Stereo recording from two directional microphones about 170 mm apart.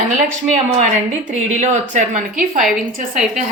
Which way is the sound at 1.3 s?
45° right (ahead or behind).